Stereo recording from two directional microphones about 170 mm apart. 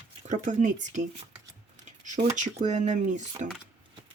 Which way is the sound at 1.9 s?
45° right (ahead or behind).